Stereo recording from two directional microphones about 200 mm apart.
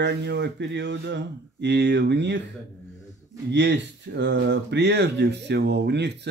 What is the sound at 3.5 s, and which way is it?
Speech, 60° right (ahead or behind).